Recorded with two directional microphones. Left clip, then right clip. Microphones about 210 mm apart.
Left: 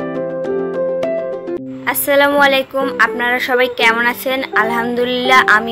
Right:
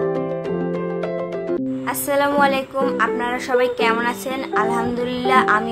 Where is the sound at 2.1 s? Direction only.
15° left (ahead or behind).